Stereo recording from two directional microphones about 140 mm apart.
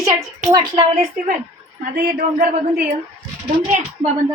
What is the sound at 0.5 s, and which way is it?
Speech, 30° right (ahead or behind).